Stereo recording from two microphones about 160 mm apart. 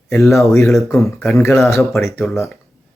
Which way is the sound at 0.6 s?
Centre (ahead or behind).